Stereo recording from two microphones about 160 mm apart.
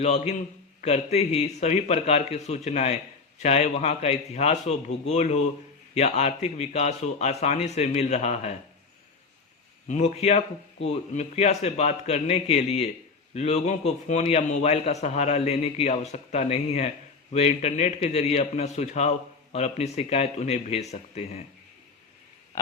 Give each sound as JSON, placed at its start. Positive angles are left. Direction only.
{"t": 0.0, "sound": "a man's voice", "side_deg": 45}
{"t": 9.9, "sound": "a man's voice", "side_deg": 45}